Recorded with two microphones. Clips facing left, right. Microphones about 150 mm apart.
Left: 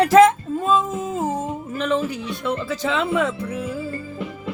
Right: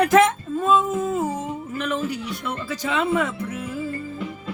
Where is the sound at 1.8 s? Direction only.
30° left (ahead or behind).